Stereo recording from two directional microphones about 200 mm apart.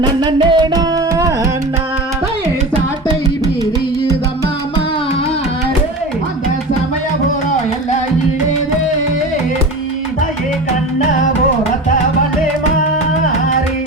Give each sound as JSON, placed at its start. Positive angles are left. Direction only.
{"t": 0.0, "sound": "music", "side_deg": -20}